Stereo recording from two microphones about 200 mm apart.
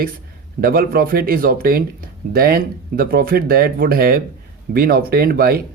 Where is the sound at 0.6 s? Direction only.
50° right (ahead or behind).